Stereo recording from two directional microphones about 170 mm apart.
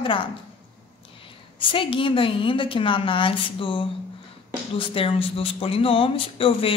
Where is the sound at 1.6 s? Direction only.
30° left (ahead or behind).